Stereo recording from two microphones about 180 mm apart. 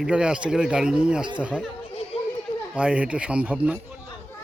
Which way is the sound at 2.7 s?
5° right (ahead or behind).